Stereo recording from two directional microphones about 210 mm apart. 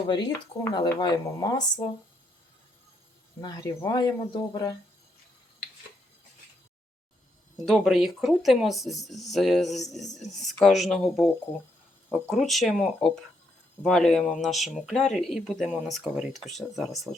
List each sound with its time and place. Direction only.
0.1 s speech: 20° left (ahead or behind)
3.4 s speech: 20° left (ahead or behind)
7.7 s speech: centre (ahead or behind)